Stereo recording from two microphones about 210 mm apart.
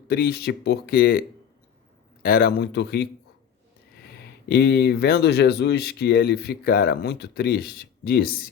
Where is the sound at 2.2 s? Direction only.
45° left (ahead or behind).